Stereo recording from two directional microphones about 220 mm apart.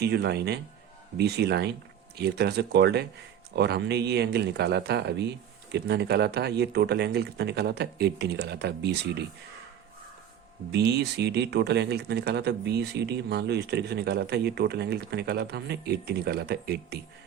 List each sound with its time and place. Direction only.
0.0 s speech: 50° right (ahead or behind)
10.7 s speech: 50° right (ahead or behind)